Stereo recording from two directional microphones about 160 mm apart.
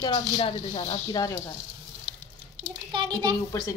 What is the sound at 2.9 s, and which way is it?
Speech, 30° right (ahead or behind).